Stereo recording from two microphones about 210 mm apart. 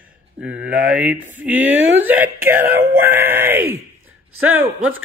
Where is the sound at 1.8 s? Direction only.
65° right (ahead or behind).